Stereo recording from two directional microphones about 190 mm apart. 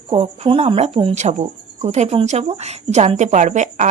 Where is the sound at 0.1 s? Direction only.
30° right (ahead or behind).